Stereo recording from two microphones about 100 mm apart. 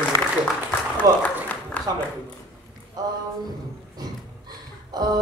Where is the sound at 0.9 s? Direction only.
15° left (ahead or behind).